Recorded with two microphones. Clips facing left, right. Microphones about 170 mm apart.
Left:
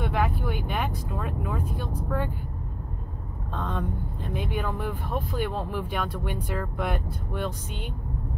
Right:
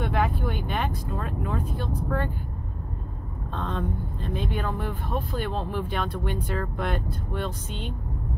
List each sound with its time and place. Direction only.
0.0 s vehicle: 5° left (ahead or behind)
3.5 s speech: 10° left (ahead or behind)